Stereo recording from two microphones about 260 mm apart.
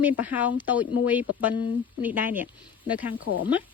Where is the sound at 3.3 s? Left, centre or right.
Left.